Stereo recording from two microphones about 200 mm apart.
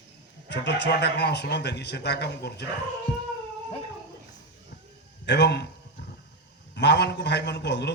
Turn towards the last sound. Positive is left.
turn(degrees=60)  # may be behind; listen again after turning